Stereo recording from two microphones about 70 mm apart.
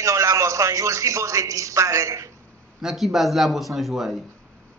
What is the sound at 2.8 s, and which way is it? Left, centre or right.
Speech, centre.